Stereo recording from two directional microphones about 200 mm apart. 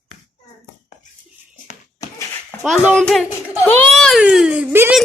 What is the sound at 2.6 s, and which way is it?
A child's voice, centre (ahead or behind).